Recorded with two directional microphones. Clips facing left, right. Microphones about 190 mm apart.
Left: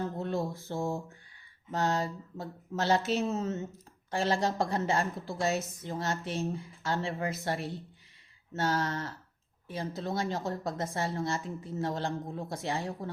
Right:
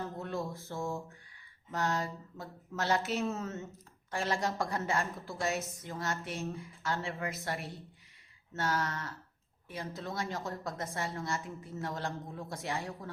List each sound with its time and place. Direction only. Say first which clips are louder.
0.2 s mantra: left 5 dB; 30° left (ahead or behind)
1.7 s a woman's voice: left 3 dB; 25° left (ahead or behind)